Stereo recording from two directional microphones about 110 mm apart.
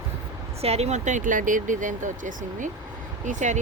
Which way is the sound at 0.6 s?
70° right (ahead or behind).